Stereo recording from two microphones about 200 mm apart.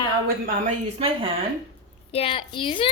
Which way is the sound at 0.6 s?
30° right (ahead or behind).